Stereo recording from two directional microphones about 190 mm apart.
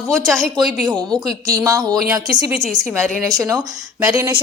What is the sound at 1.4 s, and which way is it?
A woman's voice, 15° right (ahead or behind).